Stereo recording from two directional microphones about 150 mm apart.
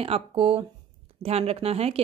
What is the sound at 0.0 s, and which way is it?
Speech, 40° right (ahead or behind).